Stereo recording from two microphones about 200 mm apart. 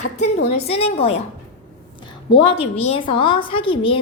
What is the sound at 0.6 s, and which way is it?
Speech, 30° left (ahead or behind).